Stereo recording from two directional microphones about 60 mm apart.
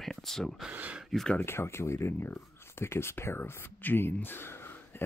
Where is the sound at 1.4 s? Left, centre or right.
Left.